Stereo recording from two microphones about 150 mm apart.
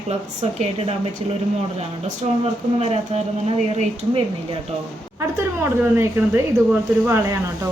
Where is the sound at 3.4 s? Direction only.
45° right (ahead or behind).